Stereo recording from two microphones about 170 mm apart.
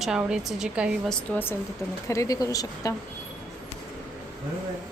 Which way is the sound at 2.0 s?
20° left (ahead or behind).